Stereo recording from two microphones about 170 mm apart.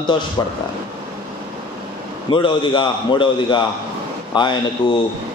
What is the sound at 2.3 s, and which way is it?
A man's voice, 25° left (ahead or behind).